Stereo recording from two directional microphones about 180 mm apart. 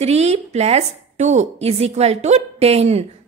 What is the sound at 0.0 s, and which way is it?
A woman's voice, 35° right (ahead or behind).